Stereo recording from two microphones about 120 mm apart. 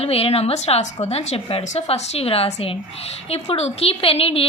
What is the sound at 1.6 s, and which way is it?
A woman's voice, 70° left (ahead or behind).